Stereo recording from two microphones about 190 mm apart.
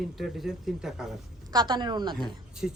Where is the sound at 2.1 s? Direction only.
Centre (ahead or behind).